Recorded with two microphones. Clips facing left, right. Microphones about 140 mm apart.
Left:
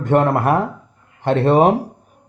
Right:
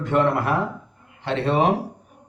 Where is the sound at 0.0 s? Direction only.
50° left (ahead or behind).